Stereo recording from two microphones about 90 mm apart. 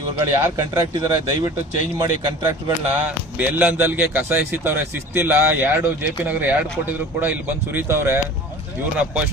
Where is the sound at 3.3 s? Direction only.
20° right (ahead or behind).